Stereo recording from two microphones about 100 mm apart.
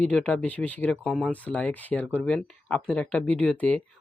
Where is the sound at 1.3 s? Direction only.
15° left (ahead or behind).